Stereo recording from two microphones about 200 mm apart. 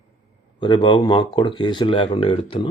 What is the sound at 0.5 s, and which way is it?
Speech, 25° left (ahead or behind).